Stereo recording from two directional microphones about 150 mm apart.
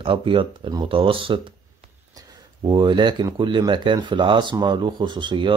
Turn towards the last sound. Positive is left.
turn(degrees=-35)  # may be behind; listen again after turning